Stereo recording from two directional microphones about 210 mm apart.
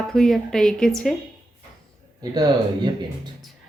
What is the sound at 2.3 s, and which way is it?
Speech, 20° right (ahead or behind).